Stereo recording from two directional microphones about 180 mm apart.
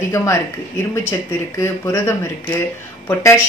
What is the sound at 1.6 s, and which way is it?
Speech, 15° left (ahead or behind).